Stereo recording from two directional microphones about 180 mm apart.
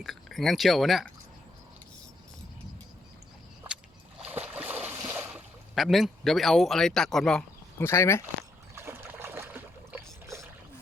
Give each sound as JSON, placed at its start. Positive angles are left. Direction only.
{"t": 0.0, "sound": "speech", "side_deg": 0}
{"t": 4.2, "sound": "a sound", "side_deg": -10}
{"t": 7.8, "sound": "speech", "side_deg": 15}
{"t": 8.7, "sound": "boat", "side_deg": -10}